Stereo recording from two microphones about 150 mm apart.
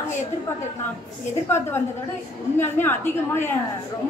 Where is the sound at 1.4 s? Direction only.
15° left (ahead or behind).